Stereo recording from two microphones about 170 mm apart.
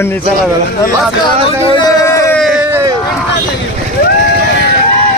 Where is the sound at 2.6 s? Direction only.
15° right (ahead or behind).